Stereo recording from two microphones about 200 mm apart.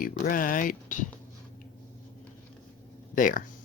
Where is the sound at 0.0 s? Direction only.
45° left (ahead or behind).